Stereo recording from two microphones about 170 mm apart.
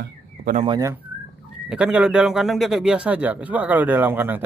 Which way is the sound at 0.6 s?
25° right (ahead or behind).